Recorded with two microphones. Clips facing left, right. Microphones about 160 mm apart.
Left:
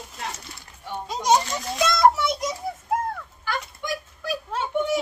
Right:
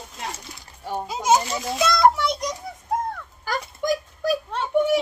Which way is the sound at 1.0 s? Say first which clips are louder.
Even; 5° right (ahead or behind).